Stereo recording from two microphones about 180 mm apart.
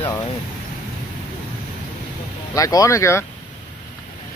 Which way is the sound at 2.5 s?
20° left (ahead or behind).